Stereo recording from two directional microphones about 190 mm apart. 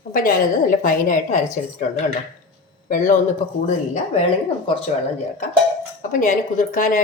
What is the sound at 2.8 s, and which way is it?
Speech, 45° left (ahead or behind).